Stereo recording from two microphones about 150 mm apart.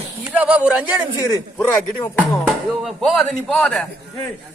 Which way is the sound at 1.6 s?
15° left (ahead or behind).